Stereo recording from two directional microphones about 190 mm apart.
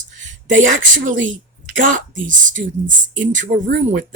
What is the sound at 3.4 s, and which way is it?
Speech, 45° right (ahead or behind).